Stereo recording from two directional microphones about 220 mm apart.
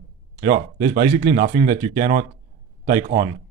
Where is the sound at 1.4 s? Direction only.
25° right (ahead or behind).